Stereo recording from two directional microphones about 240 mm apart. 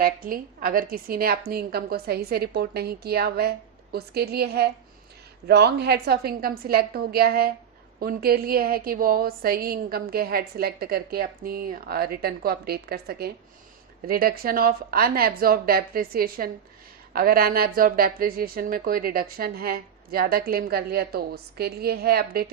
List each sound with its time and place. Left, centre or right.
0.0 s a woman's voice: right